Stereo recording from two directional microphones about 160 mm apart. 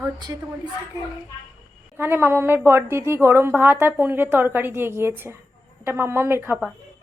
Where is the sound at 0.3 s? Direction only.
20° right (ahead or behind).